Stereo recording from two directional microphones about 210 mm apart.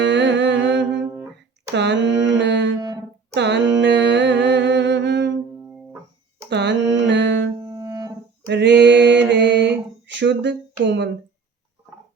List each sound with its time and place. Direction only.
0.0 s music: 55° right (ahead or behind)
0.9 s a sound: 10° right (ahead or behind)
1.7 s mantra: 55° right (ahead or behind)
2.8 s music: 20° right (ahead or behind)
3.3 s music: 55° right (ahead or behind)
6.5 s music: 55° right (ahead or behind)
7.6 s music: 15° right (ahead or behind)
8.4 s a sound: 55° right (ahead or behind)